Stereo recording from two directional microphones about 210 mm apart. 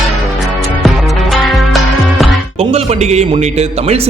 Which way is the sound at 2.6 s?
30° right (ahead or behind).